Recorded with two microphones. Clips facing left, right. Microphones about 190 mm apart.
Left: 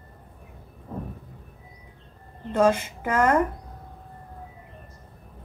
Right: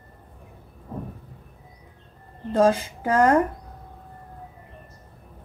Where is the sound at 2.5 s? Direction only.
35° right (ahead or behind).